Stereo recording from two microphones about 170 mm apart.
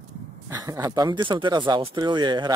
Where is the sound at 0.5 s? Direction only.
15° right (ahead or behind).